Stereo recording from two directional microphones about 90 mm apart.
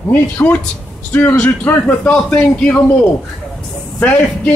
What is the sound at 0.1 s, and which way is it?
A man's voice, 20° left (ahead or behind).